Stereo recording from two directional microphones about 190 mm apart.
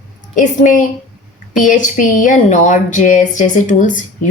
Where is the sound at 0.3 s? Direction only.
40° left (ahead or behind).